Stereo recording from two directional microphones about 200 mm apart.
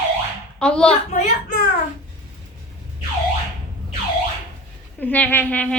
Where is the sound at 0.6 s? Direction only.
5° left (ahead or behind).